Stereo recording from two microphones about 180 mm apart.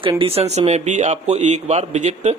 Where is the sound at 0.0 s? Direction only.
30° right (ahead or behind).